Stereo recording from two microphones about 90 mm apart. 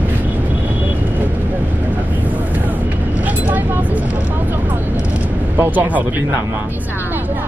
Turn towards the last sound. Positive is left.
turn(degrees=-20)  # may be behind; listen again after turning